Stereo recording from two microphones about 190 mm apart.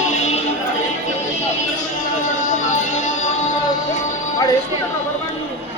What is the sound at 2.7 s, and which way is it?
Music, 40° left (ahead or behind).